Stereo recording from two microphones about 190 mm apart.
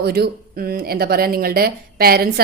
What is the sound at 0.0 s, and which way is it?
A woman's voice, 55° right (ahead or behind).